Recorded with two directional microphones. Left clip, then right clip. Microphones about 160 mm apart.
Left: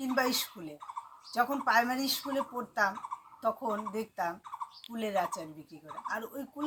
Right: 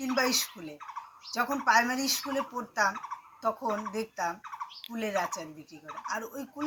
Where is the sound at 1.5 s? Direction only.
5° left (ahead or behind).